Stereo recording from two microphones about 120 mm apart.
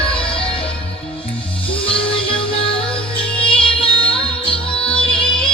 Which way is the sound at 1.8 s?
45° left (ahead or behind).